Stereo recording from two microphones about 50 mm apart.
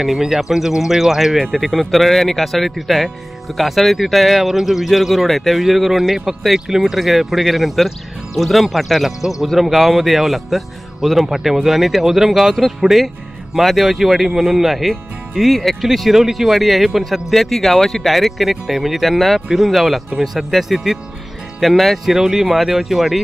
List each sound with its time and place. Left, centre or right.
0.0 s speech: centre
1.4 s speech: centre